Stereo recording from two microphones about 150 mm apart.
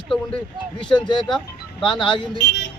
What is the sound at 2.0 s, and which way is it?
Speech, 35° left (ahead or behind).